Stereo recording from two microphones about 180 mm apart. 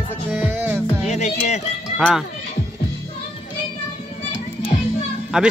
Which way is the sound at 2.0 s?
5° right (ahead or behind).